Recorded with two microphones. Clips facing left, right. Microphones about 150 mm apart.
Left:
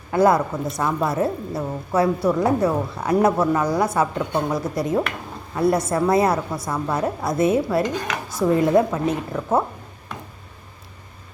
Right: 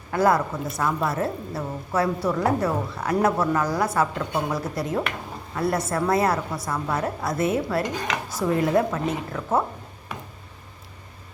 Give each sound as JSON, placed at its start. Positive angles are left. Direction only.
{"t": 0.1, "sound": "a woman's voice", "side_deg": 20}
{"t": 10.1, "sound": "tick-tock", "side_deg": -5}